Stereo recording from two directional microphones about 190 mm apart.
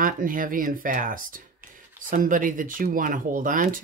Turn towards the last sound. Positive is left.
turn(degrees=-45)  # may be behind; listen again after turning